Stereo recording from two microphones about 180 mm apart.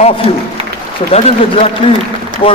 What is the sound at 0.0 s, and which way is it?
A man's voice, 30° left (ahead or behind).